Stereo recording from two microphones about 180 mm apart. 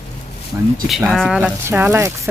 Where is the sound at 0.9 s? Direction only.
Centre (ahead or behind).